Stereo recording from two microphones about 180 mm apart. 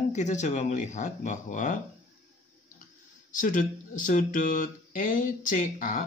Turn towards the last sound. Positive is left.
turn(degrees=45)  # may be behind; listen again after turning